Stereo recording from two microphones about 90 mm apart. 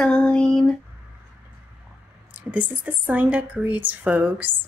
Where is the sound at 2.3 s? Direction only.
15° right (ahead or behind).